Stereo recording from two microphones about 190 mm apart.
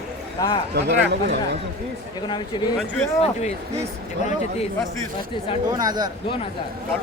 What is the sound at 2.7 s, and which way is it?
Speech, 5° left (ahead or behind).